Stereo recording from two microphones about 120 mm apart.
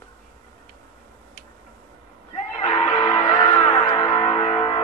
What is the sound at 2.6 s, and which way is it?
Music, 35° left (ahead or behind).